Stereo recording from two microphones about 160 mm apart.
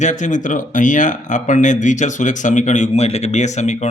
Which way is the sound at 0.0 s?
50° left (ahead or behind).